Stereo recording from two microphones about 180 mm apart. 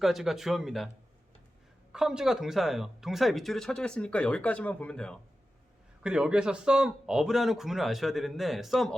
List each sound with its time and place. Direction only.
0.0 s speech: centre (ahead or behind)
1.9 s speech: 5° right (ahead or behind)